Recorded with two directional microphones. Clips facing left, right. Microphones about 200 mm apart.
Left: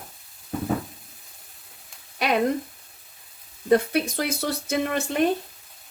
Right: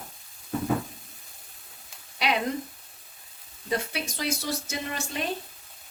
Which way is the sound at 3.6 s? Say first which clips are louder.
Left 10 dB; 55° left (ahead or behind).